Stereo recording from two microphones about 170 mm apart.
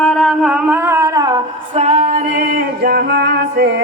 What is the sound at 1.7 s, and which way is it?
Music, 45° right (ahead or behind).